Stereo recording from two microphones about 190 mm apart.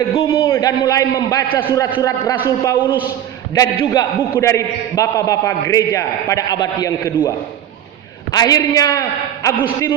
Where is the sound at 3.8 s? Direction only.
15° left (ahead or behind).